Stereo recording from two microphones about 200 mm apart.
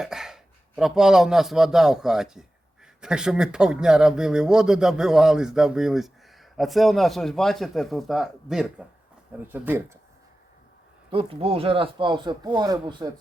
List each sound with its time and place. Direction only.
0.0 s a sound: 5° right (ahead or behind)
0.8 s speech: centre (ahead or behind)
11.1 s speech: 30° right (ahead or behind)